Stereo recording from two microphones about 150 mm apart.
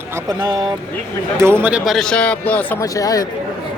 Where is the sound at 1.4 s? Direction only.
15° right (ahead or behind).